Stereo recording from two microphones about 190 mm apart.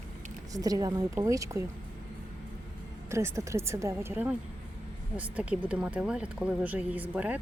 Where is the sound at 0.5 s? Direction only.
20° right (ahead or behind).